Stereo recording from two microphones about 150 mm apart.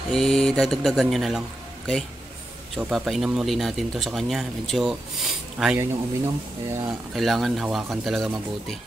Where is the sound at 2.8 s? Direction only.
Centre (ahead or behind).